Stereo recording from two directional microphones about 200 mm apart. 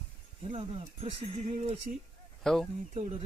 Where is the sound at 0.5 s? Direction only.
30° right (ahead or behind).